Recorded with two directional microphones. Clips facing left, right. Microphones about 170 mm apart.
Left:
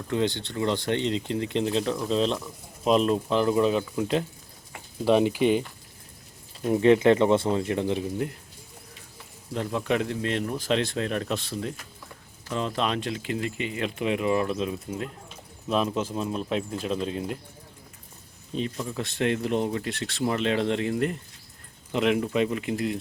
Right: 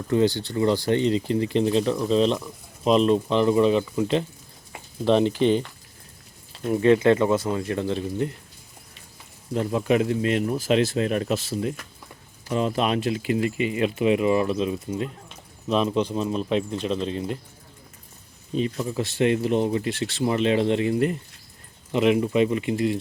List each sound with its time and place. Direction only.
0.1 s speech: 5° right (ahead or behind); by 8.0 s 15° left (ahead or behind)
9.6 s speech: 5° right (ahead or behind)
18.5 s speech: 5° right (ahead or behind)